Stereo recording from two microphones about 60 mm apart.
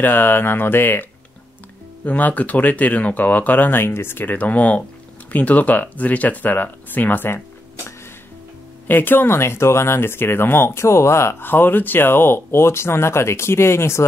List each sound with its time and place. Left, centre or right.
0.0 s speech: left
2.0 s speech: left
8.8 s speech: left
11.4 s speech: left